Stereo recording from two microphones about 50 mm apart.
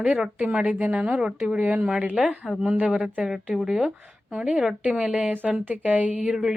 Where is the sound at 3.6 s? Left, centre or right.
Centre.